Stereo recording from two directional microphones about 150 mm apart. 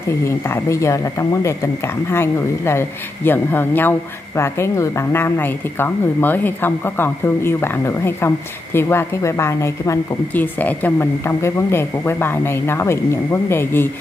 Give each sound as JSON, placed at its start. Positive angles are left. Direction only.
{"t": 0.2, "sound": "a woman's voice", "side_deg": 20}